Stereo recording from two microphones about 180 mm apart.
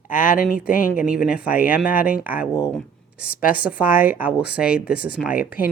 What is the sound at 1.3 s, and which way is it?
Speech, 55° left (ahead or behind).